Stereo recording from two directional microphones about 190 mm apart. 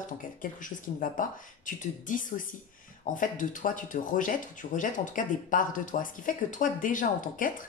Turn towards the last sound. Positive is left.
turn(degrees=45)  # may be behind; listen again after turning